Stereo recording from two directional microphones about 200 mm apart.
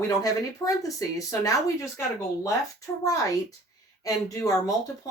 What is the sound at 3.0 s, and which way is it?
Speech, 15° left (ahead or behind).